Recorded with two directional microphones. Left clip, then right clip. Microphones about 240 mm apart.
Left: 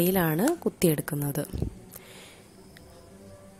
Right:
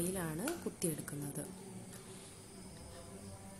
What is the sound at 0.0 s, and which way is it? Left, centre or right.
A woman's voice, left.